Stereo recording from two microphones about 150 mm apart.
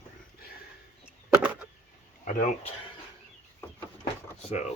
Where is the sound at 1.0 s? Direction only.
10° right (ahead or behind).